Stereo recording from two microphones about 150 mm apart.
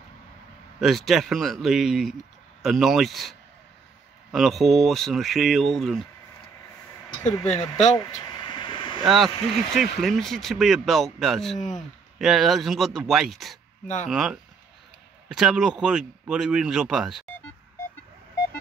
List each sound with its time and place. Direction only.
0.7 s a man's voice: centre (ahead or behind)
7.4 s speech: 45° left (ahead or behind)
8.0 s vehicle: 25° left (ahead or behind)
9.0 s a man's voice: centre (ahead or behind)
13.8 s speech: 50° left (ahead or behind)
14.1 s a man's voice: centre (ahead or behind)